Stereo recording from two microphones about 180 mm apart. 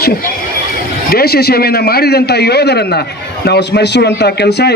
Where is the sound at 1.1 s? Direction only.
60° left (ahead or behind).